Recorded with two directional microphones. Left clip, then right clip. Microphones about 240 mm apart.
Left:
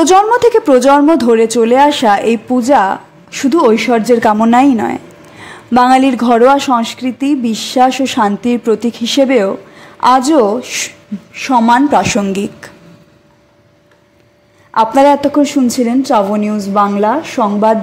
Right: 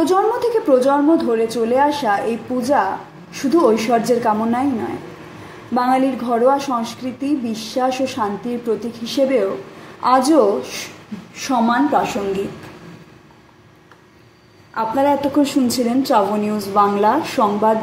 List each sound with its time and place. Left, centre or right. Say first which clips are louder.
0.0 s a woman's voice: left 9 dB; left
5.8 s a woman's voice: left 9 dB; left
14.7 s a woman's voice: left 9 dB; left